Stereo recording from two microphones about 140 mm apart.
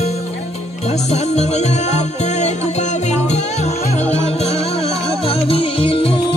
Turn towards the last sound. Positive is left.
turn(degrees=40)  # may be behind; listen again after turning